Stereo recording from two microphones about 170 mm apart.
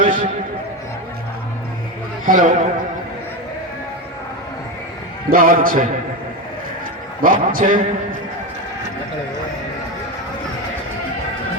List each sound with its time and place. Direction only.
0.0 s music: 55° right (ahead or behind)
2.2 s a man's voice: 50° right (ahead or behind)
5.3 s a man's voice: 55° right (ahead or behind)
7.2 s a man's voice: 55° right (ahead or behind)